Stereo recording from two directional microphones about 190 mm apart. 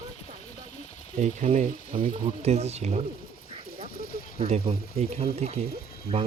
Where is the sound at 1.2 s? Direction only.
40° right (ahead or behind).